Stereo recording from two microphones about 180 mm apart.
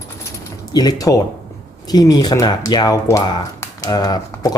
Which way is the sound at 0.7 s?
20° left (ahead or behind).